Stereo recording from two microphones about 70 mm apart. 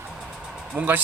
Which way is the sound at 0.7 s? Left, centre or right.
Right.